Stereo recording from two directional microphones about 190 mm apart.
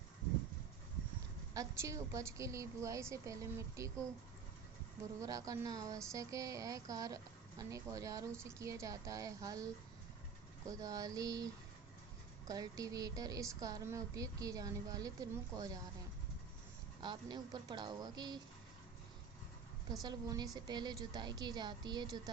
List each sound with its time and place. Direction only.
1.5 s a woman's voice: 15° right (ahead or behind)
5.2 s a woman's voice: 15° right (ahead or behind)
10.7 s a woman's voice: 15° right (ahead or behind)
17.0 s a woman's voice: 25° right (ahead or behind)
19.9 s a woman's voice: 20° right (ahead or behind)